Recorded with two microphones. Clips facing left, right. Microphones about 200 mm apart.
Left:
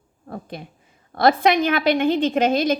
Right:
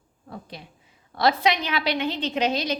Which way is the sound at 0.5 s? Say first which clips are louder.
Left 7 dB; 50° left (ahead or behind).